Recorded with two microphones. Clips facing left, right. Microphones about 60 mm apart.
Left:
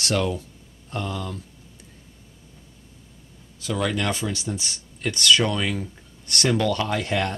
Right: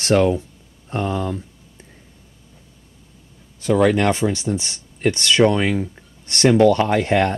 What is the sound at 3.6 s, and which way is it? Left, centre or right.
Speech, right.